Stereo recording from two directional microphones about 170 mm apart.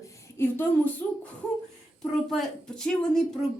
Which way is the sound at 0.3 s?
15° left (ahead or behind).